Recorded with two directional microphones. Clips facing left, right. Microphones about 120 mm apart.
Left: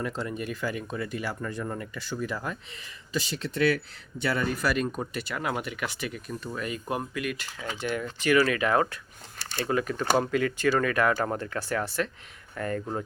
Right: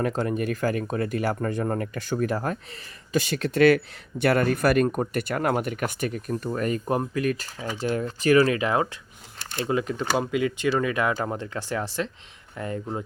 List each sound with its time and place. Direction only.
0.0 s speech: 55° right (ahead or behind); by 8.4 s 35° right (ahead or behind)
8.4 s speech: 25° right (ahead or behind)